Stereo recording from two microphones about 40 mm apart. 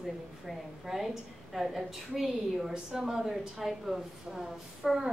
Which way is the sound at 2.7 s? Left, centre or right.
Centre.